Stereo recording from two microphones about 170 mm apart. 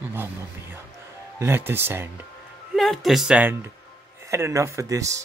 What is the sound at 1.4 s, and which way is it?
Speech, 10° right (ahead or behind).